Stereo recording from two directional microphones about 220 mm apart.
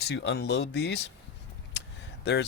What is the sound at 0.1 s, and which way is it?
Speech, 55° left (ahead or behind).